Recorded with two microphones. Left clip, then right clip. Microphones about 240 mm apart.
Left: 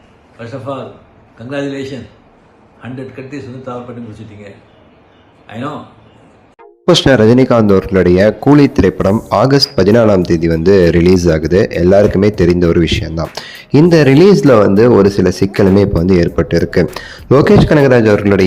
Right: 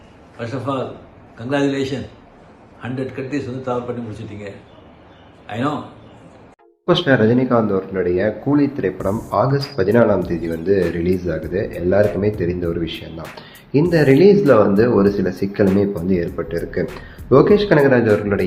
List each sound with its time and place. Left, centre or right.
0.3 s a man's voice: centre
6.8 s speech: left